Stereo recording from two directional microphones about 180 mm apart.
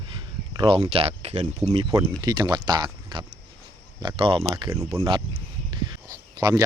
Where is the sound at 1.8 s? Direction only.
20° right (ahead or behind).